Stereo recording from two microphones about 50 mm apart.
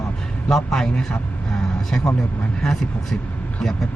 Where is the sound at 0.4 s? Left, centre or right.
Centre.